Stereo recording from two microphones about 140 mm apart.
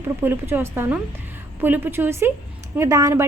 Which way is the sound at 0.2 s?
15° right (ahead or behind).